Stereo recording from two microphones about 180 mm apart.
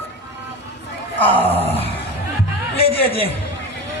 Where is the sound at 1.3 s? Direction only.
10° left (ahead or behind).